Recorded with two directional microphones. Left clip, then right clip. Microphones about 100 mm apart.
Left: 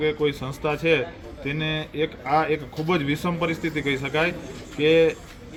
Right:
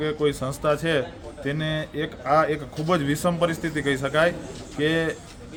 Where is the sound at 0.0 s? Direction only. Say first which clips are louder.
Left 1 dB; 50° right (ahead or behind).